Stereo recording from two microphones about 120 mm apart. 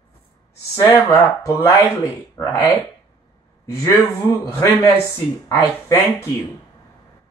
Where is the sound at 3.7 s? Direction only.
25° left (ahead or behind).